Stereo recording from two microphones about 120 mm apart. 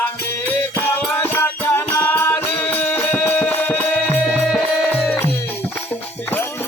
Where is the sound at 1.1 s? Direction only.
20° left (ahead or behind); by 5.0 s centre (ahead or behind).